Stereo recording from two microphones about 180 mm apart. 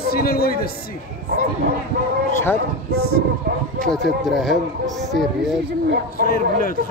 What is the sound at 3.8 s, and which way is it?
Speech, centre (ahead or behind).